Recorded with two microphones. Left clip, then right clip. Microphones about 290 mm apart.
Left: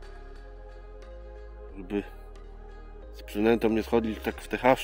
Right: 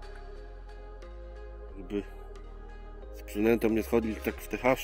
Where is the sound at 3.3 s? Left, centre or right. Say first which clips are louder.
Left 2 dB; centre.